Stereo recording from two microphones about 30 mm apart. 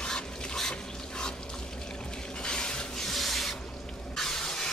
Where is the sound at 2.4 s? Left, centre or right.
Left.